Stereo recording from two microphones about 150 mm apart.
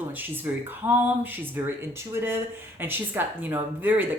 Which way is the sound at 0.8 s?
10° right (ahead or behind).